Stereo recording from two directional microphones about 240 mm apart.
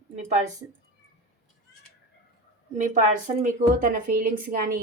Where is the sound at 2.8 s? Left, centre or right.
Right.